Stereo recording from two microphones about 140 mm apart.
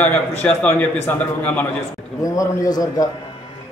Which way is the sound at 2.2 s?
25° left (ahead or behind).